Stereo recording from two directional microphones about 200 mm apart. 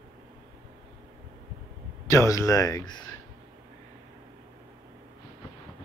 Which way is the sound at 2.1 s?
15° left (ahead or behind).